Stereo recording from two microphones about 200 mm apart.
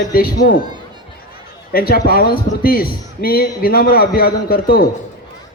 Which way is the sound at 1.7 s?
50° left (ahead or behind).